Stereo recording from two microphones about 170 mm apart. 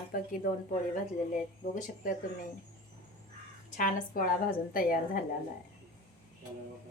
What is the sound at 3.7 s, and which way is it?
A woman's voice, 50° left (ahead or behind).